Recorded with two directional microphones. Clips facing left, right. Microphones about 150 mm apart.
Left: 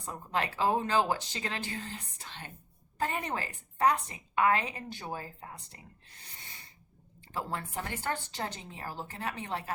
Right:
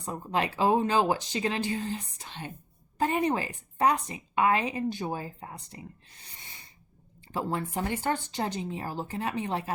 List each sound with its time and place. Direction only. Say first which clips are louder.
0.0 s a woman's voice: right 4 dB; 15° right (ahead or behind)
7.3 s speech: right 6 dB; 20° right (ahead or behind)